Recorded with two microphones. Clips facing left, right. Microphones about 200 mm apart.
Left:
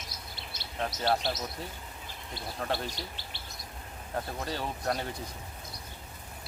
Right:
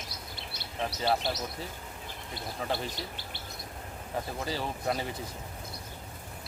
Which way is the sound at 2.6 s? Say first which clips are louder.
Even; centre (ahead or behind).